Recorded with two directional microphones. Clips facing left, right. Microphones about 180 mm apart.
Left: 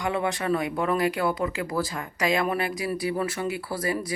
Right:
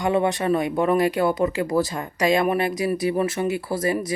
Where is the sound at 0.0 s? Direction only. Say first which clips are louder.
Right 6 dB; 25° right (ahead or behind).